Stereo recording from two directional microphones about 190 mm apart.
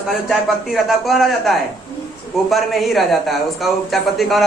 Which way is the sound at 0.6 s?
Centre (ahead or behind).